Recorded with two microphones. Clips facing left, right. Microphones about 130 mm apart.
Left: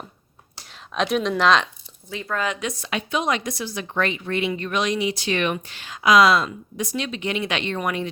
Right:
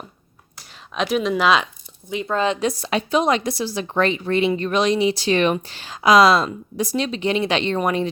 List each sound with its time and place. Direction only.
0.9 s speech: centre (ahead or behind)
2.0 s a woman's voice: 20° right (ahead or behind)